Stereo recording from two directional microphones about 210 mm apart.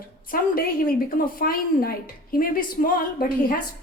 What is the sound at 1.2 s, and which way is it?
A woman's voice, 45° left (ahead or behind).